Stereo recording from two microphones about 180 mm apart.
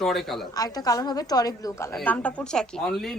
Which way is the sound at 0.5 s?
20° left (ahead or behind).